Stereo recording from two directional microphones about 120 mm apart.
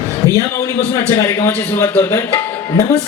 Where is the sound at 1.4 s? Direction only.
15° left (ahead or behind).